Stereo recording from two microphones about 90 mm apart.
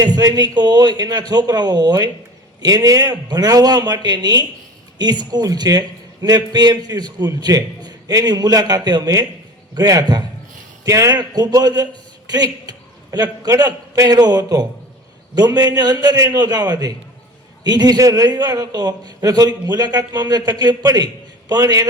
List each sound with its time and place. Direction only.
0.0 s a man's voice: 45° right (ahead or behind)